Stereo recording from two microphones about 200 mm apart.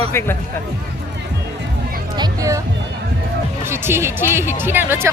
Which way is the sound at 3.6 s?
10° right (ahead or behind).